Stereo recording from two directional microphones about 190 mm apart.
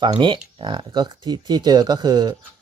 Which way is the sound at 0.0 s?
25° right (ahead or behind).